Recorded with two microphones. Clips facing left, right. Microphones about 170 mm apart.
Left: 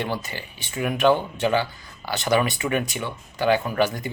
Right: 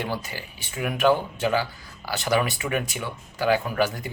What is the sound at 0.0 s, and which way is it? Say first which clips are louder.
Speech: left 2 dB; 5° right (ahead or behind).